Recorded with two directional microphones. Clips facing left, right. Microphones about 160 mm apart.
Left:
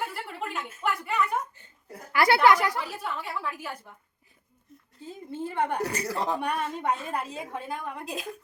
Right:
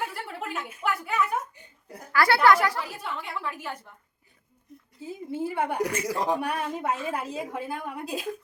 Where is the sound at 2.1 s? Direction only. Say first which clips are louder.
Even; 20° left (ahead or behind).